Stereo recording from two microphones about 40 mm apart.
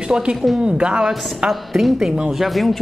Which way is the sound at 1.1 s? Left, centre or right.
Centre.